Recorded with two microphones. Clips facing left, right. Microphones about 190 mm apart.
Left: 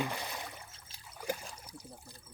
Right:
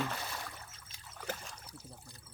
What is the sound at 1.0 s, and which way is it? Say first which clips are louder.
Trickle: left 4 dB; 10° left (ahead or behind).